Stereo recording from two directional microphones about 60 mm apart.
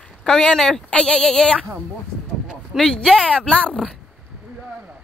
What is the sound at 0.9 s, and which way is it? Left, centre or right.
Speech, centre.